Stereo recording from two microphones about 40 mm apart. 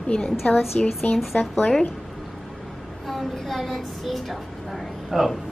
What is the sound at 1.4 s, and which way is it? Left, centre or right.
Speech, left.